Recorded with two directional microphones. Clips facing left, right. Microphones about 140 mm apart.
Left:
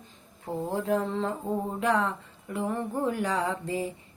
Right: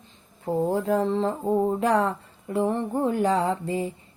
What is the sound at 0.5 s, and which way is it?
Speech, 35° right (ahead or behind).